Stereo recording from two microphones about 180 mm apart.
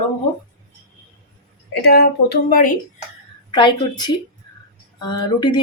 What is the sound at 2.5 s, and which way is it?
Speech, 50° left (ahead or behind).